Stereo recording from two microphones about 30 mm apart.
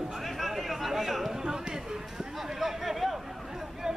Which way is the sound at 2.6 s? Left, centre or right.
Centre.